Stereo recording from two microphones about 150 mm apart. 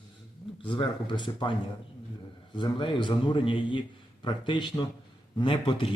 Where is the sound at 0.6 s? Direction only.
30° left (ahead or behind).